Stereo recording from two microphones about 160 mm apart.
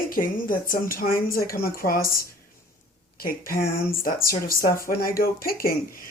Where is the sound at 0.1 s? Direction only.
60° left (ahead or behind).